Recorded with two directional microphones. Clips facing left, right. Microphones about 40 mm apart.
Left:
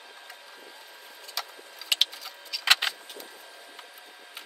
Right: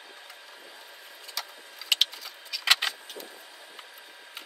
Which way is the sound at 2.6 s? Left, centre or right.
Centre.